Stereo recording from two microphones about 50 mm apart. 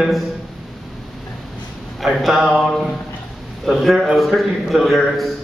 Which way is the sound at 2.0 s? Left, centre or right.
Centre.